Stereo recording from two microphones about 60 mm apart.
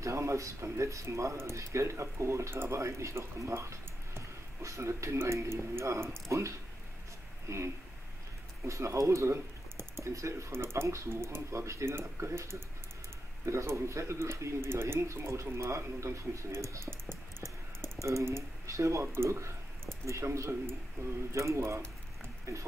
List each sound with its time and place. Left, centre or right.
0.0 s speech: right
6.2 s speech: right
17.8 s speech: right
21.5 s a sound: right